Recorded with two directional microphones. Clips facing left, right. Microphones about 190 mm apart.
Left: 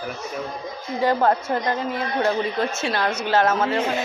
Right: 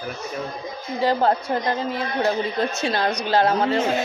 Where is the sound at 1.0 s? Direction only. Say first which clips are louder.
Even; 35° right (ahead or behind).